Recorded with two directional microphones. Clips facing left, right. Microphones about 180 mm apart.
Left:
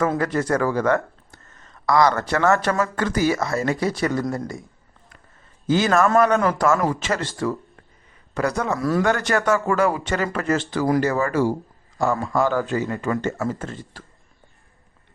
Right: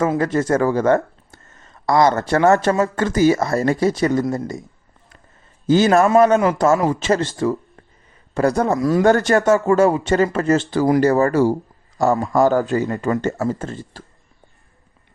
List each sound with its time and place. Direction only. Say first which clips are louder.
0.2 s speech: right 4 dB; 25° right (ahead or behind)
5.6 s a man's voice: right 5 dB; 35° right (ahead or behind)
6.1 s a man's voice: right 4 dB; 20° right (ahead or behind)
8.8 s speech: right 1 dB; 20° right (ahead or behind)
9.0 s a man's voice: right 10 dB; 35° right (ahead or behind)
9.4 s speech: right 5 dB; 25° right (ahead or behind)
11.0 s a man's voice: right 6 dB; 40° right (ahead or behind)